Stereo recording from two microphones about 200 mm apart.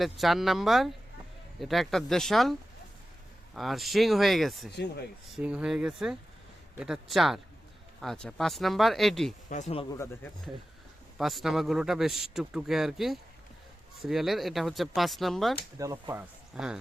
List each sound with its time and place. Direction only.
0.0 s speech: centre (ahead or behind)
9.5 s speech: 35° left (ahead or behind)
10.0 s speech: 10° left (ahead or behind)
11.2 s speech: centre (ahead or behind)
15.8 s speech: 15° right (ahead or behind)
16.6 s speech: 5° right (ahead or behind)